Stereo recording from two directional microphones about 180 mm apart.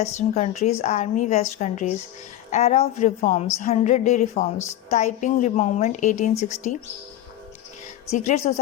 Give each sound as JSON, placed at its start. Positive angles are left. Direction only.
{"t": 0.0, "sound": "a woman's voice", "side_deg": 40}
{"t": 8.1, "sound": "a woman's voice", "side_deg": 40}